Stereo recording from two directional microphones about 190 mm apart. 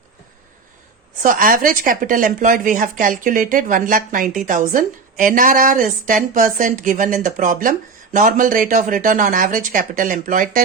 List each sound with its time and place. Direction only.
1.2 s speech: 45° right (ahead or behind)